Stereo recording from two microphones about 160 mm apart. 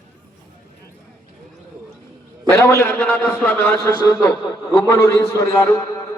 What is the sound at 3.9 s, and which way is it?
A man's voice, 20° left (ahead or behind).